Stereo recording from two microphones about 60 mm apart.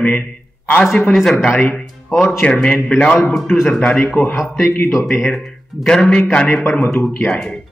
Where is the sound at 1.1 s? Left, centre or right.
Centre.